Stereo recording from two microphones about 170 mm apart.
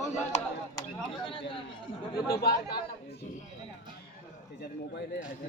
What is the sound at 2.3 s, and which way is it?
Speech, 65° left (ahead or behind).